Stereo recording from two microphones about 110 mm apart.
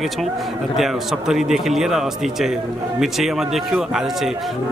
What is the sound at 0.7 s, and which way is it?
A man's voice, 5° right (ahead or behind).